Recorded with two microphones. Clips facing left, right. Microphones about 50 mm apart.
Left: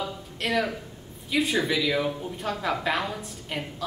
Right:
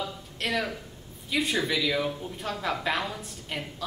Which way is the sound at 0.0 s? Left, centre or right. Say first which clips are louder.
Left 2 dB; centre.